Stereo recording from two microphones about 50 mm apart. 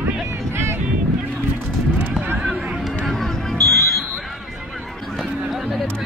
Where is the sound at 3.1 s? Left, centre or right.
Centre.